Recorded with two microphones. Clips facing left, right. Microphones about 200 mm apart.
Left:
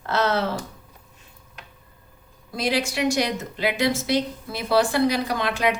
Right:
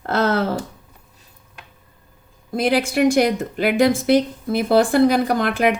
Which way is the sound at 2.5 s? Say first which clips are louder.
Right 6 dB; 55° right (ahead or behind).